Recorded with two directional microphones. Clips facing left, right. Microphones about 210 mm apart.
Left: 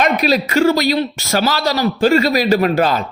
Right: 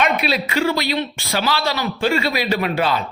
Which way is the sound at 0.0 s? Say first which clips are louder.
Left 5 dB; 40° left (ahead or behind).